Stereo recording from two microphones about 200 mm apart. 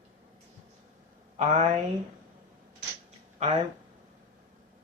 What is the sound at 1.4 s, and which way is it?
Speech, 35° right (ahead or behind).